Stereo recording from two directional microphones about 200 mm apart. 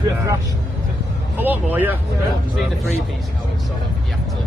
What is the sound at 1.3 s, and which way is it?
Speech, 10° right (ahead or behind).